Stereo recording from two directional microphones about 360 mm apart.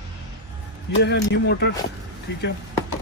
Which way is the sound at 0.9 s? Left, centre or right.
Left.